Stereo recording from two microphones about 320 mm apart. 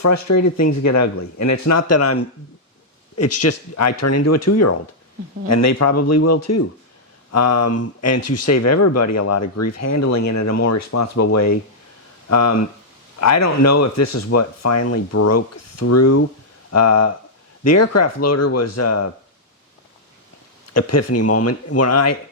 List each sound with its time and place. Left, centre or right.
0.0 s speech: left
20.7 s speech: left